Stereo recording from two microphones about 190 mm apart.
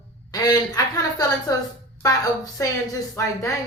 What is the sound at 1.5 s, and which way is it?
A woman's voice, 20° left (ahead or behind).